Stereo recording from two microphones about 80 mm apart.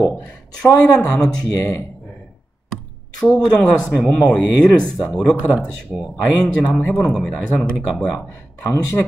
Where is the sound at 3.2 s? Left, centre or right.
Centre.